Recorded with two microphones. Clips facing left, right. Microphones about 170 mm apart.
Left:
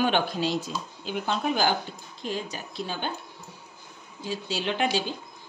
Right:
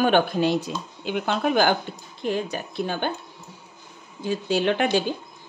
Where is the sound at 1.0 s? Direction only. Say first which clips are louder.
Right 4 dB; 70° right (ahead or behind).